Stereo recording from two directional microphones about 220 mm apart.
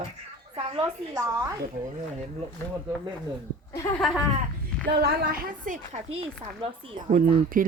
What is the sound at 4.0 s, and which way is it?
Speech, centre (ahead or behind).